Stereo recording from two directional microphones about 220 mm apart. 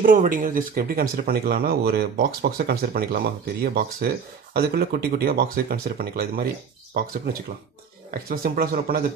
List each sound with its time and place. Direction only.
0.0 s speech: 40° right (ahead or behind)
8.1 s speech: 40° right (ahead or behind)